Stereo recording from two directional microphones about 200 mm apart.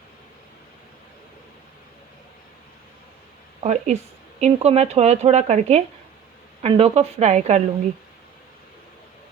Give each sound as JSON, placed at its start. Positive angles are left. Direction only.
{"t": 3.6, "sound": "speech", "side_deg": -35}